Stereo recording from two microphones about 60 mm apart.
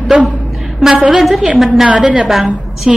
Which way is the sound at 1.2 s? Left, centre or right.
Centre.